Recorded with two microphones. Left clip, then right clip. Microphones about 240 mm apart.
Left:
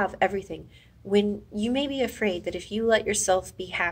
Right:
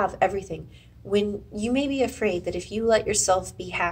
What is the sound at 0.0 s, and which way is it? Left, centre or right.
Speech, left.